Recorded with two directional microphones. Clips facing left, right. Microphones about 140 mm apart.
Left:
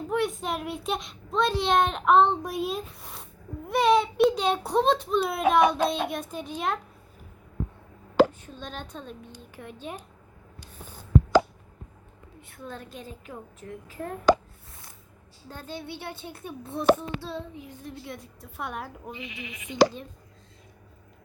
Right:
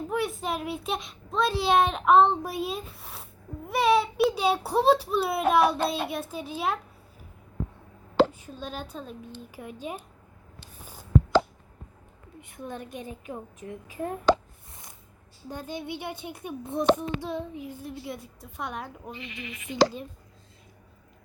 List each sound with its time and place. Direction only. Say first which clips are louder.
0.1 s a child's voice: left 3 dB; centre (ahead or behind)
8.3 s a woman's voice: right 2 dB; 10° right (ahead or behind)
12.4 s a child's voice: right 3 dB; 15° right (ahead or behind)
15.4 s a child's voice: right 3 dB; 15° right (ahead or behind)
17.8 s a child's voice: right 2 dB; 5° right (ahead or behind)